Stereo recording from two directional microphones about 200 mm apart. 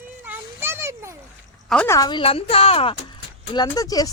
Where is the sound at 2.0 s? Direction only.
20° left (ahead or behind).